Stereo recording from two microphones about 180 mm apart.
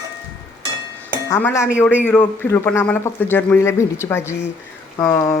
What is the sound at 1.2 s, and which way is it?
A man's voice, 15° left (ahead or behind).